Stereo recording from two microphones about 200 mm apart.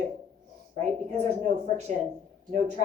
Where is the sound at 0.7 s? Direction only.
35° right (ahead or behind).